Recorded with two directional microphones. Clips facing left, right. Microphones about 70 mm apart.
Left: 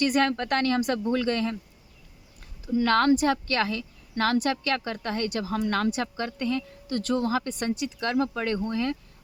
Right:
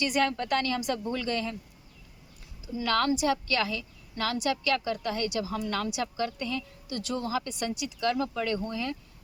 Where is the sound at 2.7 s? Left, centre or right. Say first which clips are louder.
Left 6 dB; left.